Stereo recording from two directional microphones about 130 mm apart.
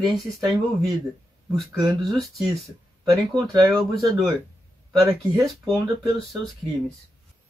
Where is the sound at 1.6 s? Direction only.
Centre (ahead or behind).